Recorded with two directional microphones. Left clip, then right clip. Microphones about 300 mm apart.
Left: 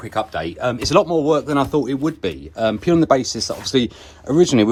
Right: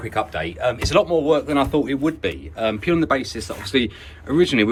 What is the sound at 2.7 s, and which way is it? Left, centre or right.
Speech, centre.